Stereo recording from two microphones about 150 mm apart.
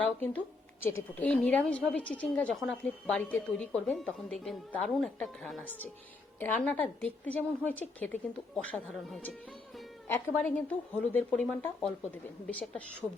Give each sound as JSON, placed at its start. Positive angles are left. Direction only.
{"t": 0.0, "sound": "a woman's voice", "side_deg": 10}